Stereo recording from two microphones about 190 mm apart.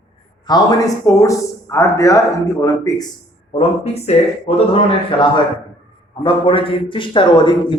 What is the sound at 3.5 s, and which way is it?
A man's voice, 35° left (ahead or behind).